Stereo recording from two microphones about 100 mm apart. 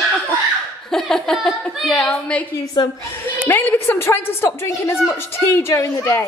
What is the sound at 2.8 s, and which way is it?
Speech, 55° left (ahead or behind).